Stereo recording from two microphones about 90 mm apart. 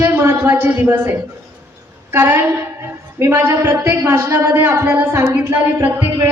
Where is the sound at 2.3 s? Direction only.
25° right (ahead or behind).